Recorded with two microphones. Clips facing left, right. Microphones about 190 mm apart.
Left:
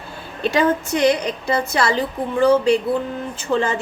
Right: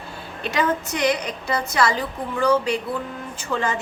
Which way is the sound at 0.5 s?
30° left (ahead or behind).